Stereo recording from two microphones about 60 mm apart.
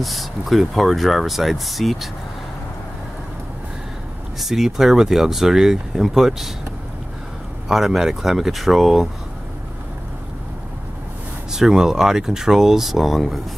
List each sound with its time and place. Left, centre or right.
0.0 s speech: centre
4.4 s speech: centre
7.6 s speech: centre
11.5 s speech: centre